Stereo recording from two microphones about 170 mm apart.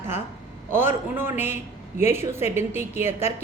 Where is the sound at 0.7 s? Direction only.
15° right (ahead or behind).